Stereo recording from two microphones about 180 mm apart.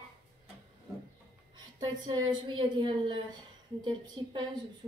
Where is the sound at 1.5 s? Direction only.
25° right (ahead or behind).